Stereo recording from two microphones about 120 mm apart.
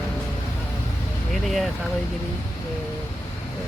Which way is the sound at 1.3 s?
Centre (ahead or behind).